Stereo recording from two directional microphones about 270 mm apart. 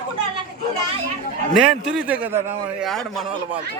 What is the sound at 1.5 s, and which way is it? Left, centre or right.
A man's voice, centre.